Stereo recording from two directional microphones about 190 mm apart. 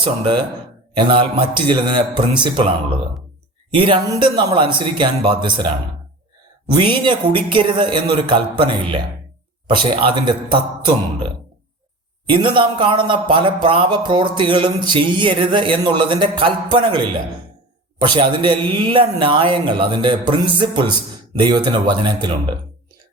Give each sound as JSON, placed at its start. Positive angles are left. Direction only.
{"t": 0.0, "sound": "speech", "side_deg": -25}
{"t": 12.3, "sound": "speech", "side_deg": -25}